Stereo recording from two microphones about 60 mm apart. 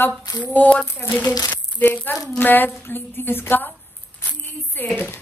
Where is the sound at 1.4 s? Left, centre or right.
Left.